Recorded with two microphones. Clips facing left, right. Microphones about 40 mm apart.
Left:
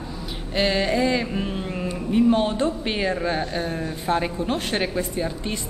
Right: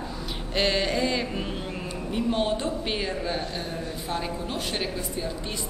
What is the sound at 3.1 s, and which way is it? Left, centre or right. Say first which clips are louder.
Speech: left 5 dB; centre.